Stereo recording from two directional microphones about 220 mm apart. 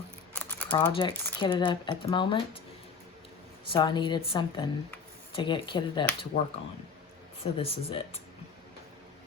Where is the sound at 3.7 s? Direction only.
20° left (ahead or behind).